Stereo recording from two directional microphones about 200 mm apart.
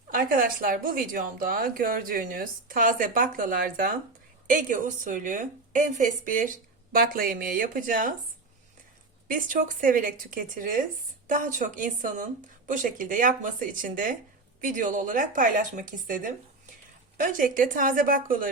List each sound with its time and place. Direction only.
0.1 s a woman's voice: 45° right (ahead or behind)
9.2 s a woman's voice: 40° right (ahead or behind)